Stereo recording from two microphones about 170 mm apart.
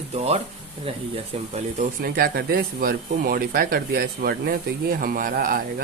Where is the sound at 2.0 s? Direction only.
60° right (ahead or behind).